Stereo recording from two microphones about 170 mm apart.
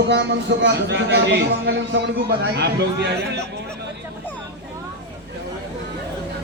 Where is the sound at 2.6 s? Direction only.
75° right (ahead or behind).